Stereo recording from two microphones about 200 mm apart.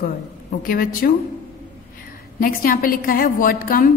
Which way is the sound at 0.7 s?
45° left (ahead or behind).